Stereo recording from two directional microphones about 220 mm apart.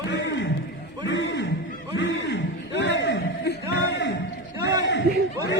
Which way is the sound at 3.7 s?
50° left (ahead or behind).